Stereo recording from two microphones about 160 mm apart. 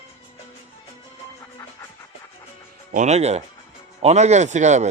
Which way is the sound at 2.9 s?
45° right (ahead or behind).